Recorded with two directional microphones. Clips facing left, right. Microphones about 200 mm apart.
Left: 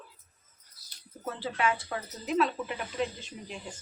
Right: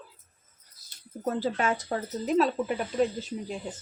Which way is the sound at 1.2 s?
45° right (ahead or behind).